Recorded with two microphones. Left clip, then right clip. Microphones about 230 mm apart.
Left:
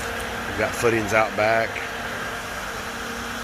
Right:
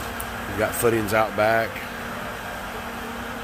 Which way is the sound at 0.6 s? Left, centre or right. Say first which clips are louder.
Even; centre.